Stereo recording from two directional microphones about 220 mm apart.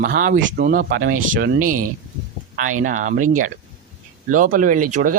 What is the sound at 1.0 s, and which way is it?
Speech, 65° right (ahead or behind).